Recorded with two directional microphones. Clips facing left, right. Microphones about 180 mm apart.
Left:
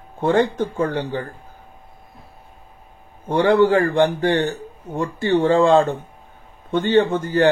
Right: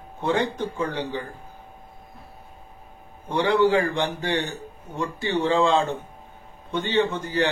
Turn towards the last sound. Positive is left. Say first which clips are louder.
# left 6 dB
turn(degrees=55)  # may be behind; listen again after turning